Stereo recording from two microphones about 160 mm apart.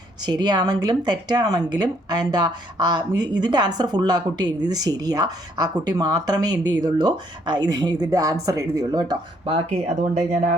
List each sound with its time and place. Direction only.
0.3 s speech: 25° right (ahead or behind)
9.5 s speech: 40° right (ahead or behind)